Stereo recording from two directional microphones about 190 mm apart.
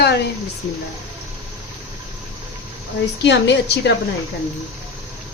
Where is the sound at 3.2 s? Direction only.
65° left (ahead or behind).